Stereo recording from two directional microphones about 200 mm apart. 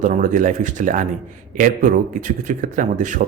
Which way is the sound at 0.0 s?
40° right (ahead or behind).